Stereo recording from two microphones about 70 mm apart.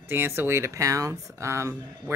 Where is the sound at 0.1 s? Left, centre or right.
Right.